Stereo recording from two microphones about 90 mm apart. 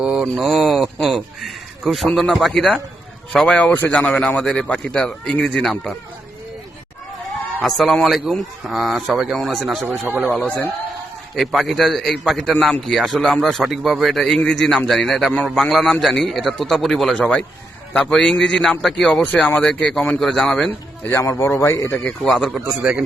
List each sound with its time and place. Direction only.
0.0 s a man's voice: 5° right (ahead or behind); by 4.0 s 20° left (ahead or behind)
4.0 s a man's voice: 10° left (ahead or behind)
7.6 s a man's voice: centre (ahead or behind)
11.3 s a man's voice: centre (ahead or behind)
19.1 s a man's voice: 15° left (ahead or behind)
21.0 s a man's voice: 30° left (ahead or behind)
22.2 s a man's voice: 5° left (ahead or behind)
22.8 s a man's voice: 10° right (ahead or behind)